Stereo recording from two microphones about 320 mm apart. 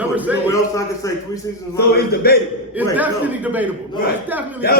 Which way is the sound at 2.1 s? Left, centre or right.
Left.